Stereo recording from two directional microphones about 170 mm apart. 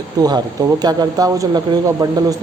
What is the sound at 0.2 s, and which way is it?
Speech, 25° right (ahead or behind).